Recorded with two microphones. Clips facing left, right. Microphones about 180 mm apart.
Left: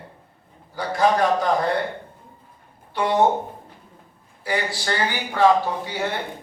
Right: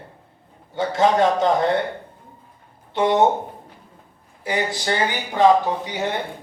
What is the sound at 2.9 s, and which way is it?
Speech, 20° right (ahead or behind).